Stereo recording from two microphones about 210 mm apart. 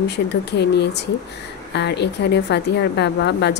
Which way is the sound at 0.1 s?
55° left (ahead or behind).